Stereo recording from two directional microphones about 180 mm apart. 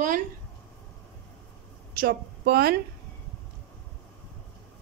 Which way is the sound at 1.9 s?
60° right (ahead or behind).